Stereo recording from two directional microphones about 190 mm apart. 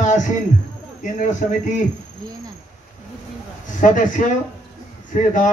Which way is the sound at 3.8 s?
45° left (ahead or behind).